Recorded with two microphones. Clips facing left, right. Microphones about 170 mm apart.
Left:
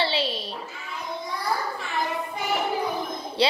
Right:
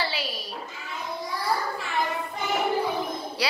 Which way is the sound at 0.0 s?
25° left (ahead or behind).